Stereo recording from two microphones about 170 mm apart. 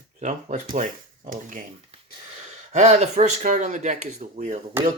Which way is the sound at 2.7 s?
40° right (ahead or behind).